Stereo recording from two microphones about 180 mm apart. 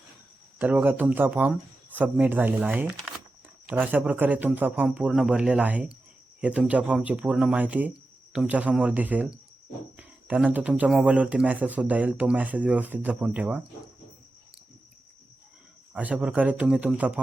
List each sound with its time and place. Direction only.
0.6 s speech: 10° right (ahead or behind)
15.9 s speech: 10° right (ahead or behind)